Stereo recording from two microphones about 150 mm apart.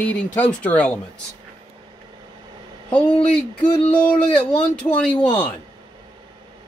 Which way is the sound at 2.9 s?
5° left (ahead or behind).